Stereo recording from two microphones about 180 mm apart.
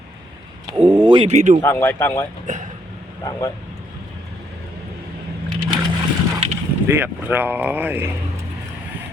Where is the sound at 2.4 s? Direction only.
45° right (ahead or behind).